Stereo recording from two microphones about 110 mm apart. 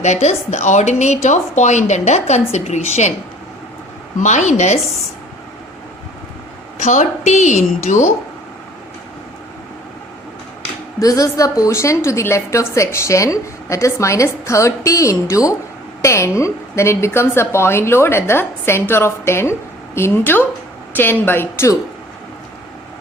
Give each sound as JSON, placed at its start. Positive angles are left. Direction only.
{"t": 0.0, "sound": "a woman's voice", "side_deg": 90}
{"t": 4.2, "sound": "a woman's voice", "side_deg": 90}
{"t": 6.7, "sound": "a woman's voice", "side_deg": 90}
{"t": 11.0, "sound": "a woman's voice", "side_deg": 30}